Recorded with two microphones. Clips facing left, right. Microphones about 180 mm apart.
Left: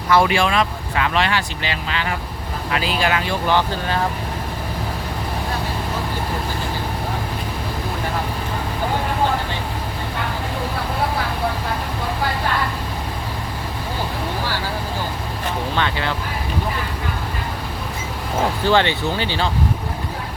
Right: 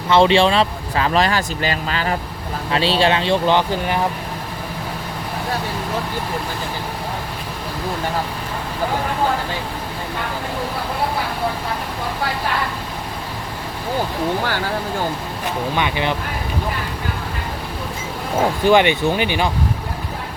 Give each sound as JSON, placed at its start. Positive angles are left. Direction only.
{"t": 0.1, "sound": "speech", "side_deg": -25}
{"t": 2.7, "sound": "speech", "side_deg": -30}
{"t": 15.7, "sound": "speech", "side_deg": -15}
{"t": 18.6, "sound": "speech", "side_deg": -15}